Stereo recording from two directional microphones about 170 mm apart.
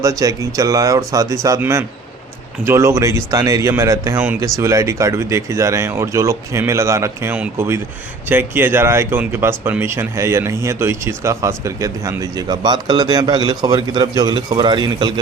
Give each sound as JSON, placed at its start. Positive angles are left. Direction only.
{"t": 0.0, "sound": "speech", "side_deg": -20}